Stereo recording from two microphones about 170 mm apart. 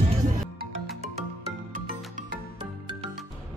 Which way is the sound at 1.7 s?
50° right (ahead or behind).